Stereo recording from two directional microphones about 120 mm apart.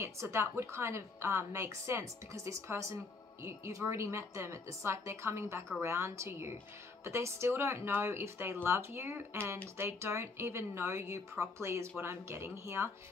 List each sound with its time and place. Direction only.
0.0 s a woman's voice: 20° right (ahead or behind)